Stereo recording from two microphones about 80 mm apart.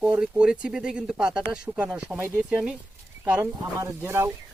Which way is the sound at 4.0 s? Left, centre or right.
Right.